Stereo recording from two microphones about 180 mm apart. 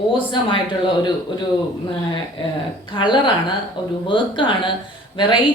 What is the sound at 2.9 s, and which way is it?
A woman's voice, 25° left (ahead or behind).